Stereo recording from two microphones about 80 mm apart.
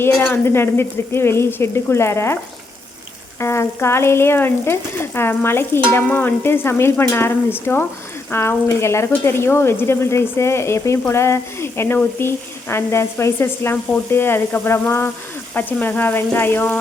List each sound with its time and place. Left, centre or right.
0.2 s speech: left
3.4 s speech: left